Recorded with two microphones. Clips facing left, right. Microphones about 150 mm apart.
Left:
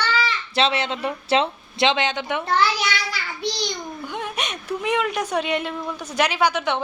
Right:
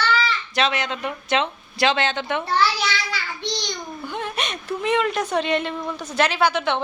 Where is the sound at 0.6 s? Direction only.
30° left (ahead or behind); by 2.7 s 10° left (ahead or behind).